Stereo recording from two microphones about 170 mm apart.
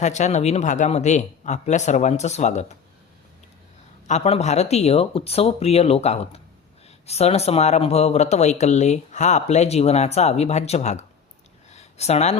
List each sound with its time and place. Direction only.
0.0 s speech: 45° left (ahead or behind)
4.0 s speech: 40° left (ahead or behind)
11.7 s a sound: 40° left (ahead or behind)